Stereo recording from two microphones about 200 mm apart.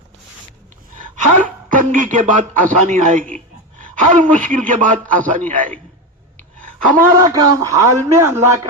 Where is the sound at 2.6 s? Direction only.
40° right (ahead or behind).